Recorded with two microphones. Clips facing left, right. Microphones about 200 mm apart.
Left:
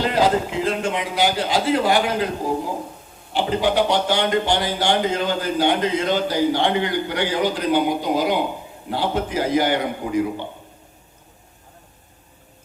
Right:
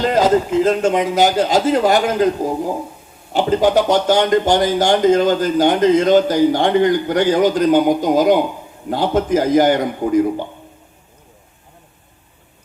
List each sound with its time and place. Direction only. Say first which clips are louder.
0.0 s speech: right 5 dB; 45° right (ahead or behind)
3.3 s speech: right 5 dB; 45° right (ahead or behind)